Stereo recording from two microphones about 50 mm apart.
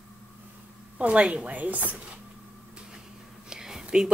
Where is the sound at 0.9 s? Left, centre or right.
Right.